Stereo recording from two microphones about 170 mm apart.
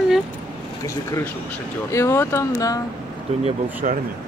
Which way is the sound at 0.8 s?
20° left (ahead or behind).